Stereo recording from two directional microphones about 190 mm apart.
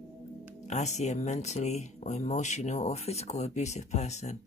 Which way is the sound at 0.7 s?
40° left (ahead or behind).